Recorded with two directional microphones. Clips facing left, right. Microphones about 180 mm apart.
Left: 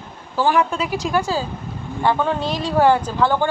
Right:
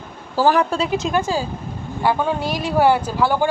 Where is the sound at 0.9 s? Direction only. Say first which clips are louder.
Right 1 dB; 20° right (ahead or behind).